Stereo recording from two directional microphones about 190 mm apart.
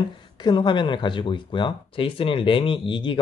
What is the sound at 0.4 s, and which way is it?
Speech, 25° left (ahead or behind).